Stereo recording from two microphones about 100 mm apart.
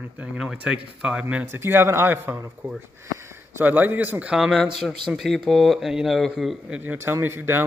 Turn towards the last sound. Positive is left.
turn(degrees=-25)  # may be behind; listen again after turning